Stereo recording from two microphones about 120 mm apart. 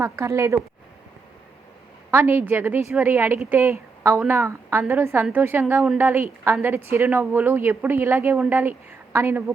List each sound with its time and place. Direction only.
0.0 s a woman's voice: 25° right (ahead or behind)
2.0 s a woman's voice: 20° right (ahead or behind)